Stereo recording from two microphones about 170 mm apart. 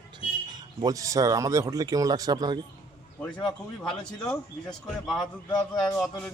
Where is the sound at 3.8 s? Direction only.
5° left (ahead or behind).